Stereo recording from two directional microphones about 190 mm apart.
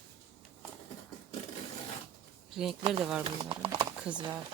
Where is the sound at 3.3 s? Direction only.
30° right (ahead or behind).